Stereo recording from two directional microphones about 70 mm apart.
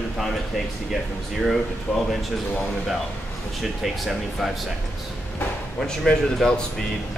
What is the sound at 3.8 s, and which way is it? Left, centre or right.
Speech, centre.